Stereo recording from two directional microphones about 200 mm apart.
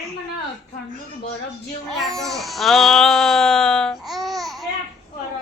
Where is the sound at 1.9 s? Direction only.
Centre (ahead or behind).